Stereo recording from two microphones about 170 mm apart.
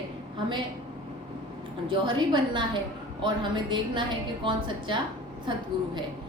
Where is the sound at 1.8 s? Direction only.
30° right (ahead or behind).